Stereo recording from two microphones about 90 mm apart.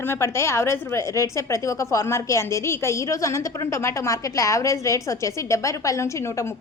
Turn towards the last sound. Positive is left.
turn(degrees=35)  # may be behind; listen again after turning